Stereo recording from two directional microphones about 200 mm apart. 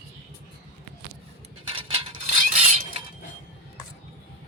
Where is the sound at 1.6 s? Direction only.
25° right (ahead or behind).